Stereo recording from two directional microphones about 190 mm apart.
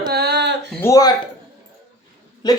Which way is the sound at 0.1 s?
60° right (ahead or behind).